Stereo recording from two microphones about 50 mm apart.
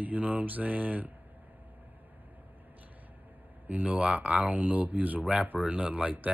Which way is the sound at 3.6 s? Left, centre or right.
Right.